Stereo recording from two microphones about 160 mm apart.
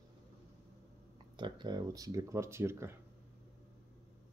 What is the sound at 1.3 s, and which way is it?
Speech, 30° right (ahead or behind).